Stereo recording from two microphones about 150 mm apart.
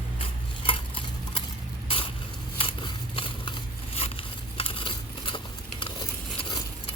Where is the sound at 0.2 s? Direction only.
35° left (ahead or behind).